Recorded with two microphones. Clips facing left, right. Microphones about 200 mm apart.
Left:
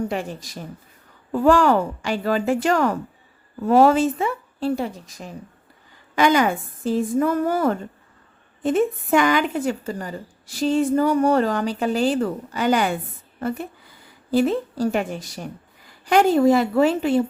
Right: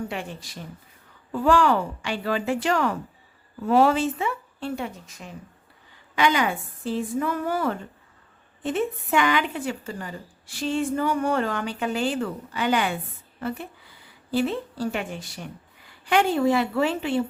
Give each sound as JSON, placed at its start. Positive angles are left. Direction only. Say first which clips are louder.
{"t": 0.0, "sound": "a woman's voice", "louder": "left 6 dB", "side_deg": 40}